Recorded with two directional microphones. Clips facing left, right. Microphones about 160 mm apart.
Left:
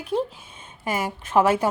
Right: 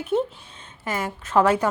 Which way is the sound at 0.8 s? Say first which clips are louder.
Left 1 dB; 10° left (ahead or behind).